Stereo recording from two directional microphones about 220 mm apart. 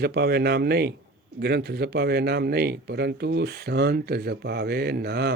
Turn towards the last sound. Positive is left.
turn(degrees=-45)  # may be behind; listen again after turning